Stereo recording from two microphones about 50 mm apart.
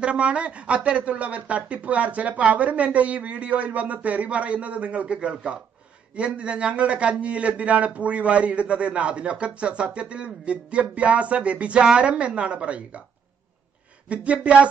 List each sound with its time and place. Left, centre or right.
0.0 s speech: right
14.0 s speech: right